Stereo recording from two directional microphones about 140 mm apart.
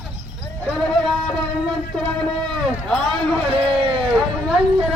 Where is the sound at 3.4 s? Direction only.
40° right (ahead or behind).